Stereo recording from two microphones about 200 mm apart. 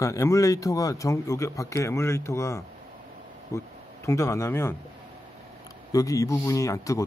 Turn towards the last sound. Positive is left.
turn(degrees=15)  # may be behind; listen again after turning